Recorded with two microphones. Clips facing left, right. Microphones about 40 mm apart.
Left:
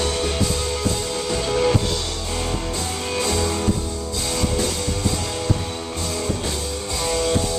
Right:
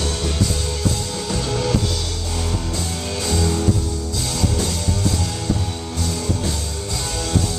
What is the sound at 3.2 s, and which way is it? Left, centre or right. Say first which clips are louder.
Music: right 1 dB; centre.